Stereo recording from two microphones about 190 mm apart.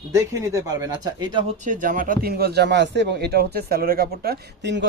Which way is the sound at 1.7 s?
45° right (ahead or behind).